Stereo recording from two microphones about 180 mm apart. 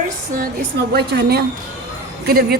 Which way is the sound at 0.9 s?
65° right (ahead or behind).